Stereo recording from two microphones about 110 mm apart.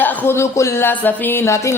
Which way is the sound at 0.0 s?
20° left (ahead or behind).